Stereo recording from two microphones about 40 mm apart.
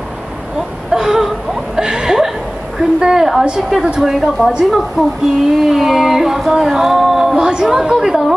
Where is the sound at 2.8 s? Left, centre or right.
Centre.